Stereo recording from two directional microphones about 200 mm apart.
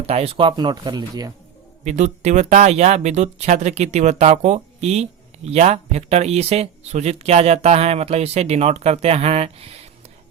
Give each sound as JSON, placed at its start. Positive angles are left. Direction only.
{"t": 0.1, "sound": "speech", "side_deg": -30}
{"t": 1.8, "sound": "speech", "side_deg": -35}